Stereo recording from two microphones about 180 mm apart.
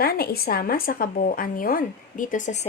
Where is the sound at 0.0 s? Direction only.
60° left (ahead or behind).